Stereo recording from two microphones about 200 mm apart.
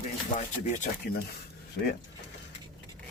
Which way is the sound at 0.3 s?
35° left (ahead or behind).